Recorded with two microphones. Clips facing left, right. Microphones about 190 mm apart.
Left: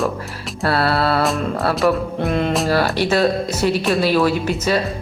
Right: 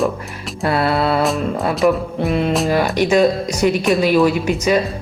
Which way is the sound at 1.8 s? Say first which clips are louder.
Right 3 dB; centre (ahead or behind).